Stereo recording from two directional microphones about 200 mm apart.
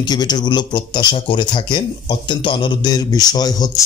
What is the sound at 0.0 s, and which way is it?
Speech, 20° left (ahead or behind).